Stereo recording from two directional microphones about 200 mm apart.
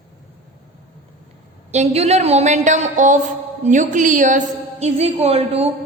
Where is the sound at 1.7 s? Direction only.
30° right (ahead or behind).